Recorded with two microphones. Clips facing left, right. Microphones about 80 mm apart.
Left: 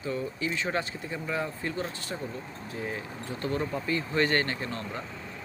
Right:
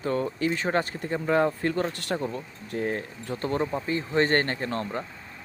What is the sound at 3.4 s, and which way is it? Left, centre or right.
Speech, right.